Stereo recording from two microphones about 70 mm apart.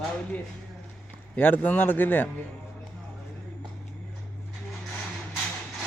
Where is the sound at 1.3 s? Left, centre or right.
Left.